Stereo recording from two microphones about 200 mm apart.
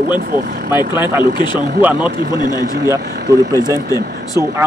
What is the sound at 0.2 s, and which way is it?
Speech, 50° right (ahead or behind).